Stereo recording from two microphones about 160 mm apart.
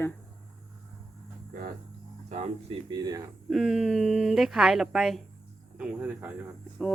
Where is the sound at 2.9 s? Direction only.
25° right (ahead or behind).